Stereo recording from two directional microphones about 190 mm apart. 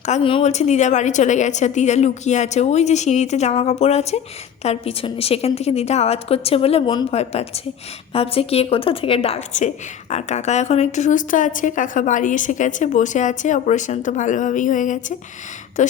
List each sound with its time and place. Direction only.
0.0 s a woman's voice: 30° left (ahead or behind)